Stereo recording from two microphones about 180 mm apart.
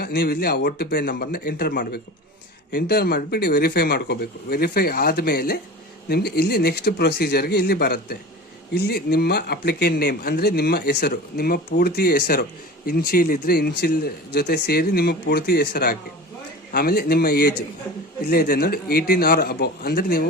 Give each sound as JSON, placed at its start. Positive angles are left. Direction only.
{"t": 0.0, "sound": "speech", "side_deg": 60}